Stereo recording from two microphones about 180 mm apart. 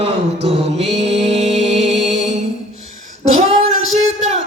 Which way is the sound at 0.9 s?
35° right (ahead or behind).